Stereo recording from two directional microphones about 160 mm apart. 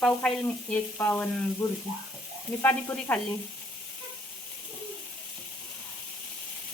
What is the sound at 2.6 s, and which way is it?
Frying, 10° left (ahead or behind).